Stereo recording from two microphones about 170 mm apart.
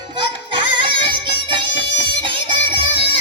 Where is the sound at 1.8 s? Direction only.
90° left.